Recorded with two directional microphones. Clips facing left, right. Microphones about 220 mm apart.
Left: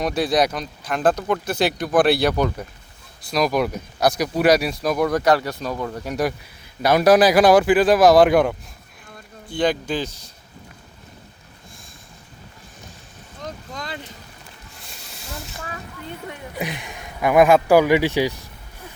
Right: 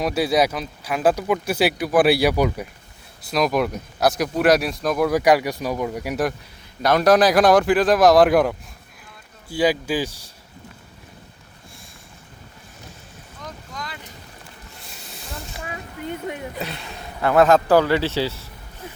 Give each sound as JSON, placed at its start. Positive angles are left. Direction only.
{"t": 0.0, "sound": "speech", "side_deg": -5}
{"t": 6.8, "sound": "speech", "side_deg": 5}
{"t": 13.7, "sound": "vehicle", "side_deg": 25}
{"t": 16.6, "sound": "speech", "side_deg": 15}